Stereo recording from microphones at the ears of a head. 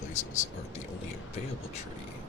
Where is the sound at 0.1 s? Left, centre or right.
Left.